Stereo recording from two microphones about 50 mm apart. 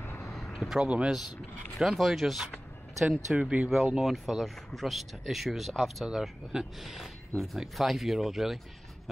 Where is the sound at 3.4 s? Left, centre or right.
Right.